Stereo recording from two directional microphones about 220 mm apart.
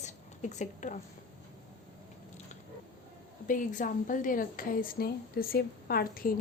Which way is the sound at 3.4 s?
35° left (ahead or behind).